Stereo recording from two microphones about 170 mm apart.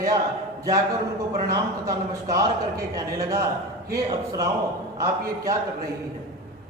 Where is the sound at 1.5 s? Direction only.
20° right (ahead or behind).